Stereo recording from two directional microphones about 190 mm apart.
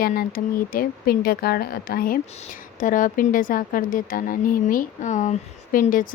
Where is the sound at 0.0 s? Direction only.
50° left (ahead or behind).